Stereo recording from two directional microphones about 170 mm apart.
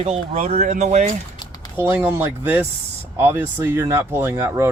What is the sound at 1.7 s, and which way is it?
Speech, 15° right (ahead or behind).